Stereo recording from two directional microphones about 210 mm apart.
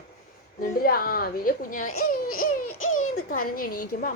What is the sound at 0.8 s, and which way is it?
A woman's voice, 45° left (ahead or behind).